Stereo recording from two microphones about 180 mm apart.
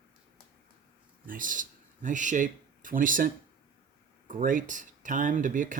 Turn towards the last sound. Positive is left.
turn(degrees=-45)  # may be behind; listen again after turning